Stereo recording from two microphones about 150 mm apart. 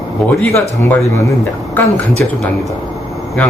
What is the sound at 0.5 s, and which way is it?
Speech, 15° left (ahead or behind).